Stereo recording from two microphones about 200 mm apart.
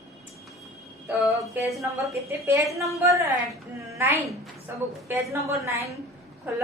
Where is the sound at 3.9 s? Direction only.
15° right (ahead or behind).